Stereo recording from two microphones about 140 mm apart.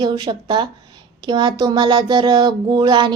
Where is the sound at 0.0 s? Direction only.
35° right (ahead or behind).